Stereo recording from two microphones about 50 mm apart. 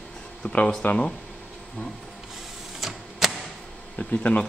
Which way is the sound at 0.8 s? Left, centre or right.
Left.